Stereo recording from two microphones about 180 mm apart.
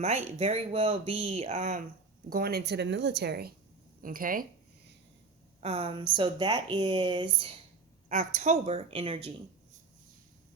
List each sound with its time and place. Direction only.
0.0 s speech: 35° right (ahead or behind)
2.3 s speech: 60° right (ahead or behind)
4.0 s speech: 50° right (ahead or behind)
5.5 s speech: 35° right (ahead or behind)
8.1 s speech: 45° right (ahead or behind)